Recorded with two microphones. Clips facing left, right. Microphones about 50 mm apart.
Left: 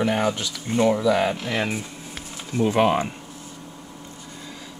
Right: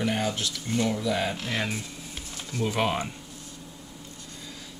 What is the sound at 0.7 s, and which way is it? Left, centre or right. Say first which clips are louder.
Speech: left 8 dB; left.